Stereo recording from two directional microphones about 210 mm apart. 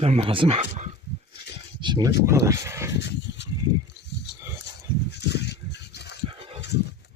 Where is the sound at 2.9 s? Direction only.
55° left (ahead or behind).